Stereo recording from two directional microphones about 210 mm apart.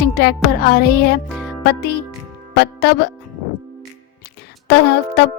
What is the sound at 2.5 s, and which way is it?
Speech, 50° left (ahead or behind).